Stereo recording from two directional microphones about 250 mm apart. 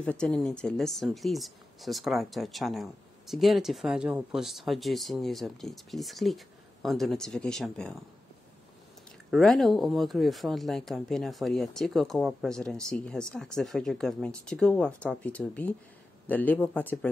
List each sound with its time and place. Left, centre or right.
0.0 s speech: centre
9.3 s speech: centre